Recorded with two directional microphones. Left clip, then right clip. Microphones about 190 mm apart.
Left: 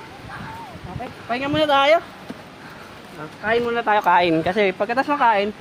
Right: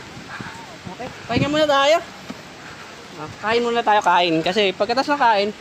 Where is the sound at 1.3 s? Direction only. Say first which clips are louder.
Right 1 dB; 5° right (ahead or behind).